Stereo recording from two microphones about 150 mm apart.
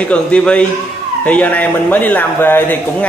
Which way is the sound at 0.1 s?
10° left (ahead or behind).